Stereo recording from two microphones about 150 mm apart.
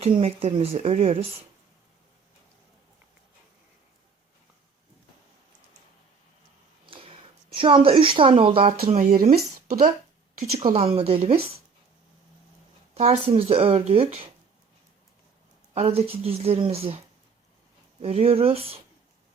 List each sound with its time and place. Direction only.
0.0 s speech: 40° right (ahead or behind)
6.8 s a sound: 35° right (ahead or behind)
7.5 s speech: 35° right (ahead or behind)
8.9 s speech: 55° right (ahead or behind)
10.3 s speech: 55° right (ahead or behind)
12.9 s speech: 45° right (ahead or behind)
15.7 s speech: 40° right (ahead or behind)
18.0 s speech: 40° right (ahead or behind)